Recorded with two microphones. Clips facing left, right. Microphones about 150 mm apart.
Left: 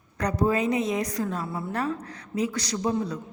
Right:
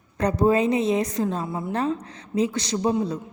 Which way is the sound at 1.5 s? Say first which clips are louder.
Right 3 dB; 15° right (ahead or behind).